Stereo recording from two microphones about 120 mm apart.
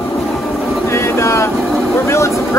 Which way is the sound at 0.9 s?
25° left (ahead or behind).